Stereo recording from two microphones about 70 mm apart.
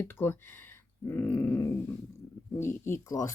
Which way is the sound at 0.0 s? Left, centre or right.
Left.